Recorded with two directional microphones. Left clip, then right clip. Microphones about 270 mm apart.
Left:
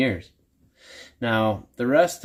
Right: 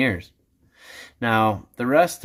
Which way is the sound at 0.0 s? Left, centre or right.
Centre.